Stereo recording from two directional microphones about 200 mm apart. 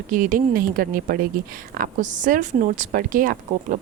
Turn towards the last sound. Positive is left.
turn(degrees=-45)  # may be behind; listen again after turning